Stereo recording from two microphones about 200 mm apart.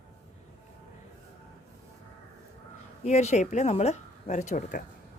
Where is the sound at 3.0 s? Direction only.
35° left (ahead or behind).